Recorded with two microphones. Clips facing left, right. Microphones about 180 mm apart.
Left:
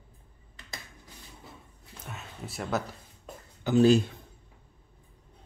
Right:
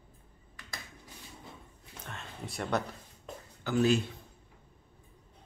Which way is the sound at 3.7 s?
20° left (ahead or behind).